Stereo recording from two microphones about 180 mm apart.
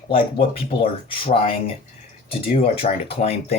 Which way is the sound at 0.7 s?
30° left (ahead or behind).